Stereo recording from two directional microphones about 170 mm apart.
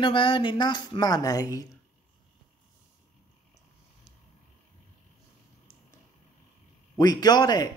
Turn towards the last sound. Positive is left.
turn(degrees=25)  # may be behind; listen again after turning